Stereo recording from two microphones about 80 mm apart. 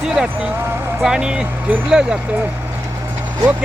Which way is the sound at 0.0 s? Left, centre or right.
Centre.